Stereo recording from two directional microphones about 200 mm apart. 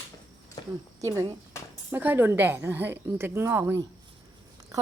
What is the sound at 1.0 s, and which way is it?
A woman's voice, 15° right (ahead or behind).